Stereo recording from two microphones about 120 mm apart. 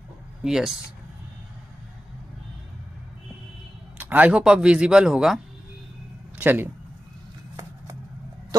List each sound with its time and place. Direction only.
0.4 s speech: 5° right (ahead or behind)
4.0 s speech: 15° right (ahead or behind)
6.3 s speech: 15° right (ahead or behind)